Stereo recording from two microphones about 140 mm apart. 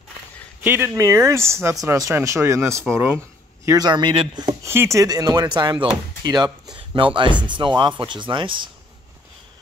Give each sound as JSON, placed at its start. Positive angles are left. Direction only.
{"t": 0.7, "sound": "speech", "side_deg": -15}
{"t": 4.6, "sound": "speech", "side_deg": -20}